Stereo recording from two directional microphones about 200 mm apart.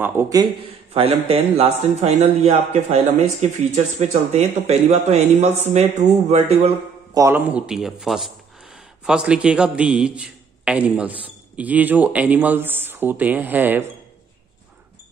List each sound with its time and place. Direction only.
0.0 s a man's voice: 15° right (ahead or behind)
0.9 s a man's voice: 30° right (ahead or behind)
7.2 s a man's voice: 10° right (ahead or behind)